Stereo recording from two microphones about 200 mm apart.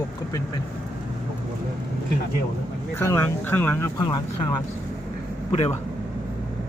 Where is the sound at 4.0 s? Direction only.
20° left (ahead or behind).